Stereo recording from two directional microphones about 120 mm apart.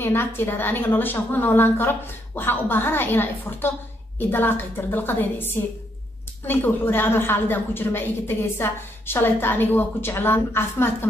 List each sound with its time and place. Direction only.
0.0 s a woman's voice: 20° left (ahead or behind)